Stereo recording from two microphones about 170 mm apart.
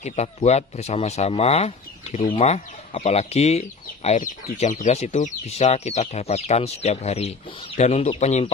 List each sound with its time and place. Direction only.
0.0 s speech: 40° left (ahead or behind)